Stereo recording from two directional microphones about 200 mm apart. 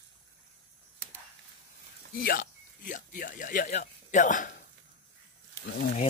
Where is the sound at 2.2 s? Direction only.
45° left (ahead or behind).